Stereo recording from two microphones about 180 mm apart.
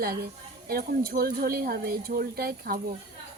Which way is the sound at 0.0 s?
55° right (ahead or behind).